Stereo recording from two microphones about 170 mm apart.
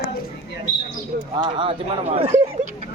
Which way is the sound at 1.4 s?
30° right (ahead or behind).